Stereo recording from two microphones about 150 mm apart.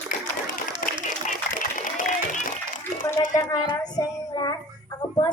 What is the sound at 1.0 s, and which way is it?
Music, 60° left (ahead or behind).